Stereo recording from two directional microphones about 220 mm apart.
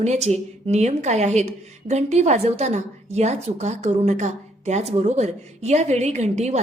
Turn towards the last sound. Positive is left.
turn(degrees=-30)  # may be behind; listen again after turning